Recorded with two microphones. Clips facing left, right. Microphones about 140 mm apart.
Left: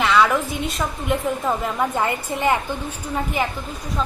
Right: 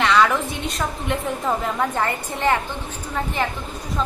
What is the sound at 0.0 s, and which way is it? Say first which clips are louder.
A woman's voice: even; 5° left (ahead or behind).